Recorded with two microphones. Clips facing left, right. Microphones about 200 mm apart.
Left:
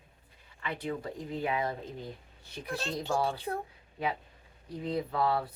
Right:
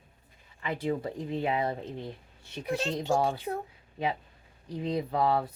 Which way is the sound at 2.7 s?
15° right (ahead or behind).